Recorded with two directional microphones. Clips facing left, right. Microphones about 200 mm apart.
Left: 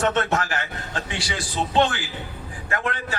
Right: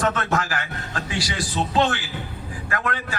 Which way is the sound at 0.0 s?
25° left (ahead or behind).